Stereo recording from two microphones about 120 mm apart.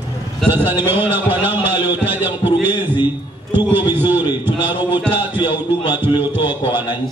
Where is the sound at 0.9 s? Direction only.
15° right (ahead or behind).